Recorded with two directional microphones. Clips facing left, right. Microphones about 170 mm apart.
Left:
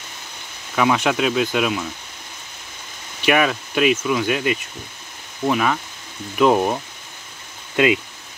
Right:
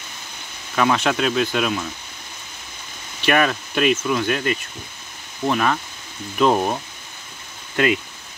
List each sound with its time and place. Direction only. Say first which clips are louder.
0.7 s speech: left 1 dB; 10° left (ahead or behind)
3.3 s speech: left 1 dB; 5° left (ahead or behind)
7.7 s speech: left 2 dB; 15° left (ahead or behind)